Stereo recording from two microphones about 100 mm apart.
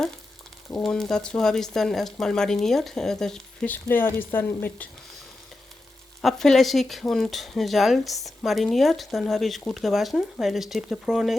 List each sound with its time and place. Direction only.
0.7 s speech: 5° left (ahead or behind)
3.7 s speech: 20° left (ahead or behind)
6.2 s speech: 5° left (ahead or behind)